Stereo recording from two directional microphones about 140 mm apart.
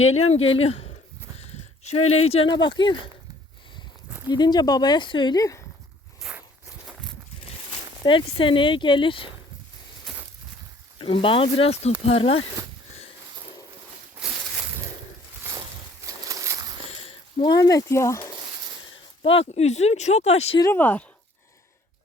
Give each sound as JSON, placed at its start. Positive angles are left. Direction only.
{"t": 0.3, "sound": "speech", "side_deg": 45}
{"t": 1.4, "sound": "a sound", "side_deg": 50}
{"t": 2.5, "sound": "speech", "side_deg": 35}
{"t": 4.3, "sound": "speech", "side_deg": 30}
{"t": 6.2, "sound": "zipper", "side_deg": -5}
{"t": 7.7, "sound": "speech", "side_deg": 35}
{"t": 10.9, "sound": "speech", "side_deg": 40}
{"t": 16.3, "sound": "a sound", "side_deg": -20}
{"t": 17.0, "sound": "a sound", "side_deg": 40}
{"t": 17.5, "sound": "speech", "side_deg": 25}
{"t": 19.2, "sound": "speech", "side_deg": 40}
{"t": 20.7, "sound": "speech", "side_deg": 10}